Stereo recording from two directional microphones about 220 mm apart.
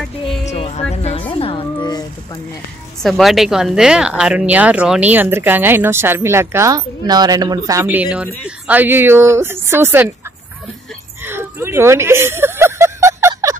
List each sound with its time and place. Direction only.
0.5 s music: 30° left (ahead or behind)
3.0 s speech: centre (ahead or behind)
11.2 s a sound: 10° right (ahead or behind)